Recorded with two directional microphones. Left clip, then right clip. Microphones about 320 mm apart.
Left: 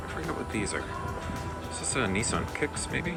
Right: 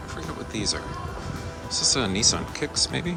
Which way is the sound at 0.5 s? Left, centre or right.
Centre.